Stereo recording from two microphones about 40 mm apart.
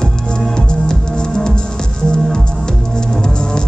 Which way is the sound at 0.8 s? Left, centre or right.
Centre.